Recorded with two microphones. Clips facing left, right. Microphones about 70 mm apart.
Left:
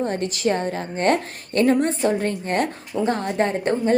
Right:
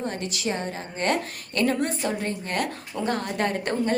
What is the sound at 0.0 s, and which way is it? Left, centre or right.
A woman's voice, left.